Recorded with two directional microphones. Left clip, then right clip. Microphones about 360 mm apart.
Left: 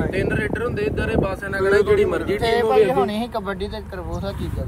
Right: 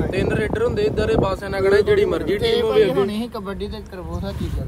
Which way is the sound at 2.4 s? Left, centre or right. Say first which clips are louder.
Left 1 dB; centre.